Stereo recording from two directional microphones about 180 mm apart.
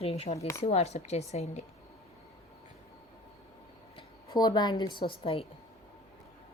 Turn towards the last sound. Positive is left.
turn(degrees=35)  # may be behind; listen again after turning